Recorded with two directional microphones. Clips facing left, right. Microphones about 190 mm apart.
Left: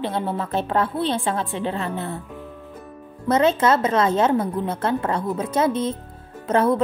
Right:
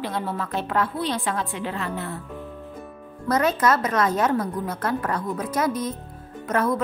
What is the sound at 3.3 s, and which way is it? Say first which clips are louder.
A woman's voice: left 3 dB; 25° left (ahead or behind).